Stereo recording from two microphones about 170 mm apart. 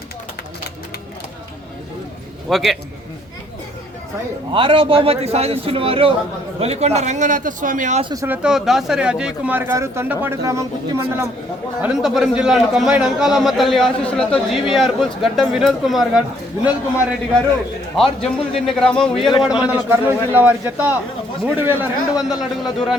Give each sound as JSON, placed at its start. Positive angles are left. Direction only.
{"t": 2.5, "sound": "a man's voice", "side_deg": 0}
{"t": 4.5, "sound": "a man's voice", "side_deg": -30}
{"t": 8.1, "sound": "speech", "side_deg": -15}
{"t": 8.4, "sound": "speech", "side_deg": -5}
{"t": 11.8, "sound": "a man's voice", "side_deg": -5}
{"t": 17.9, "sound": "a man's voice", "side_deg": 0}